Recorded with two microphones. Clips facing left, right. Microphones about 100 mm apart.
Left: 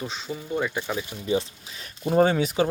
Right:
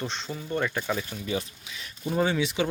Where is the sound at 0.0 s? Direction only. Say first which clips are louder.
Left 1 dB; 5° left (ahead or behind).